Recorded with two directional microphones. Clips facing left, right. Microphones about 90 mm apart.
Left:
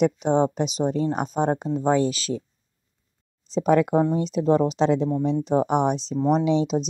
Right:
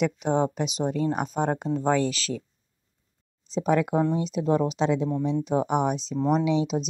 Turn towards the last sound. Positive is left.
turn(degrees=35)  # may be behind; listen again after turning